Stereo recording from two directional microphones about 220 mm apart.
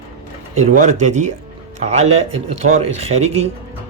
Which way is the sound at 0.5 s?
35° right (ahead or behind).